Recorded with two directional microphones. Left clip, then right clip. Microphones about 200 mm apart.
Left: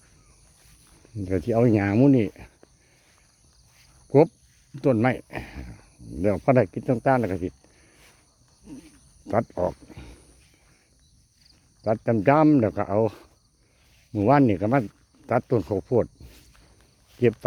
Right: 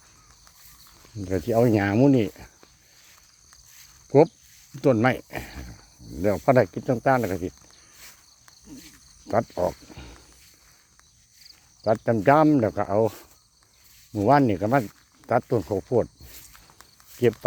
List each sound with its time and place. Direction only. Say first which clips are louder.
1.2 s speech: right 1 dB; 10° left (ahead or behind)
4.1 s speech: right 1 dB; 5° left (ahead or behind)
9.3 s wild animals: right 1 dB; 5° left (ahead or behind)
12.0 s speech: even; 10° left (ahead or behind)
16.3 s walk: right 6 dB; 30° right (ahead or behind)
17.2 s speech: even; 10° left (ahead or behind)